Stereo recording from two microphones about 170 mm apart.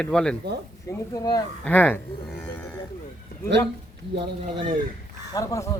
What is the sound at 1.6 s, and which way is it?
Speech, 10° left (ahead or behind).